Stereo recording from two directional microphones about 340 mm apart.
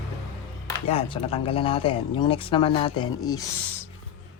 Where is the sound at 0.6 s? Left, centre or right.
Centre.